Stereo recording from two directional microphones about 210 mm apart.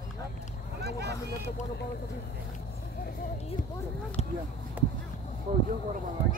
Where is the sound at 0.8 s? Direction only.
50° right (ahead or behind).